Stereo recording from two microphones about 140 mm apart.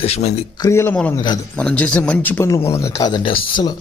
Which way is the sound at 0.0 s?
50° left (ahead or behind).